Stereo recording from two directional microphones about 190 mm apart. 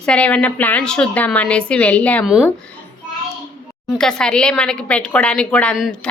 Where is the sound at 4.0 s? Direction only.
5° left (ahead or behind).